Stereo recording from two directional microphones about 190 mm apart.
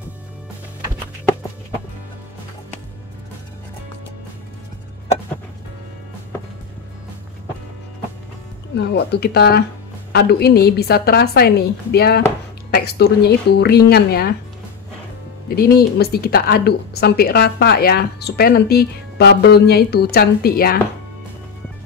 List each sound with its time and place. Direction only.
8.7 s a woman's voice: 60° left (ahead or behind)
15.4 s a woman's voice: 55° left (ahead or behind)